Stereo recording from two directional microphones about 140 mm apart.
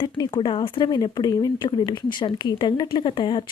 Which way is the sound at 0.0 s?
35° left (ahead or behind).